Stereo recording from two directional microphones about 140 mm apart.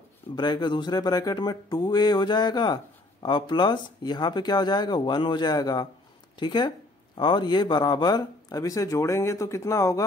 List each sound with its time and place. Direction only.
0.4 s speech: 30° left (ahead or behind)